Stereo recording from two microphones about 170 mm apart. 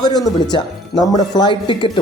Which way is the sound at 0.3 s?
25° left (ahead or behind).